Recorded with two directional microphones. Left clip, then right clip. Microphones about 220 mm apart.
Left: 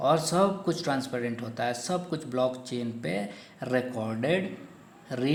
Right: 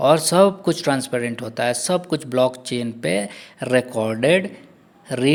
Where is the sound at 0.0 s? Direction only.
40° right (ahead or behind).